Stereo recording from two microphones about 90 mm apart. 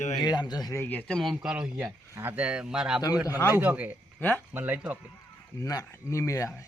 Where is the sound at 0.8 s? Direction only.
15° left (ahead or behind).